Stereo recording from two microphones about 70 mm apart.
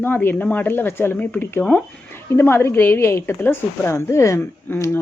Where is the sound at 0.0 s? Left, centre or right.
Left.